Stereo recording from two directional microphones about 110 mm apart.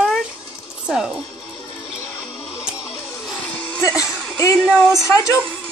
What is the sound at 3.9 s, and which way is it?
Speech, 30° left (ahead or behind).